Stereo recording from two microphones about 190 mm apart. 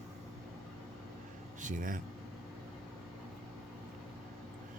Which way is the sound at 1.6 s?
45° right (ahead or behind).